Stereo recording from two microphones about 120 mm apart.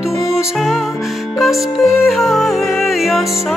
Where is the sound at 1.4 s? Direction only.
Centre (ahead or behind).